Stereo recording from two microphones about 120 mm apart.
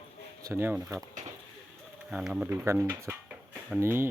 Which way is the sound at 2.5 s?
25° right (ahead or behind).